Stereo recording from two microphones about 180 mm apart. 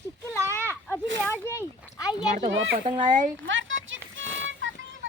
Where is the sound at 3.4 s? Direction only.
90° right.